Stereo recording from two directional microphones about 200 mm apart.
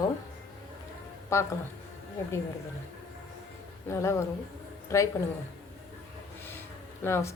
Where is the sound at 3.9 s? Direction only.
15° left (ahead or behind).